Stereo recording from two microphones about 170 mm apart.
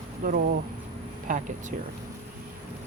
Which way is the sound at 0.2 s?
55° right (ahead or behind).